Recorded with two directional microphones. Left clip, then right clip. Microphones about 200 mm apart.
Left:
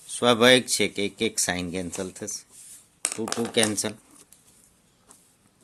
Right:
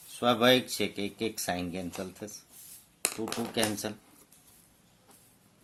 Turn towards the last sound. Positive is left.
turn(degrees=50)  # may be behind; listen again after turning